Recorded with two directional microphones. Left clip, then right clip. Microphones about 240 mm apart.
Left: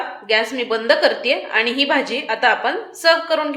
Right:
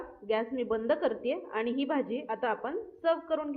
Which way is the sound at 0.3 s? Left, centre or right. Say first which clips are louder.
Left 12 dB; centre.